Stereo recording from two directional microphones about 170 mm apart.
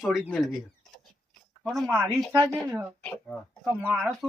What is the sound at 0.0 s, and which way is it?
Speech, centre (ahead or behind).